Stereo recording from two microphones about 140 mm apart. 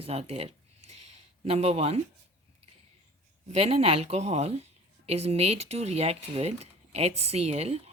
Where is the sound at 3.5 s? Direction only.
50° right (ahead or behind).